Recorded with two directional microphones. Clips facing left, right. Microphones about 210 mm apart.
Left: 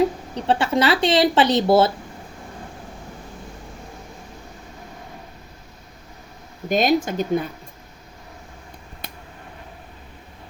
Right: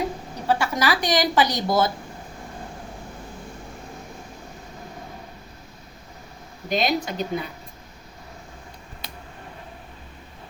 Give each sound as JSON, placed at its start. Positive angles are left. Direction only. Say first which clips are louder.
{"t": 0.4, "sound": "speech", "louder": "left 4 dB", "side_deg": 30}
{"t": 6.7, "sound": "speech", "louder": "left 5 dB", "side_deg": 50}